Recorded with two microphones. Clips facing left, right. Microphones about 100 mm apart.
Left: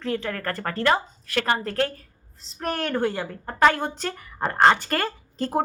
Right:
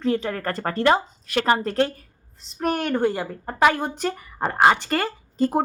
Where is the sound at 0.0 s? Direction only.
20° right (ahead or behind).